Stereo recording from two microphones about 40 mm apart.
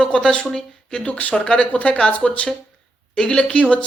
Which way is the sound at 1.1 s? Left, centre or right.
Left.